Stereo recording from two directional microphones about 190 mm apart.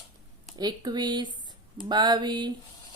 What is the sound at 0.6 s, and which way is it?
Speech, 20° right (ahead or behind).